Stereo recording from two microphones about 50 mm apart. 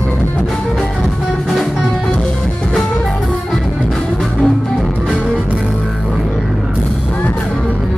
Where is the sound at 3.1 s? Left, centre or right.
Centre.